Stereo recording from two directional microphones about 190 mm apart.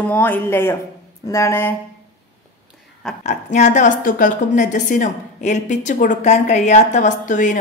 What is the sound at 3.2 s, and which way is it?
A woman's voice, 40° left (ahead or behind).